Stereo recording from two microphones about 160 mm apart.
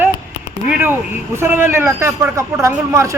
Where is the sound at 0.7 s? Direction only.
15° right (ahead or behind).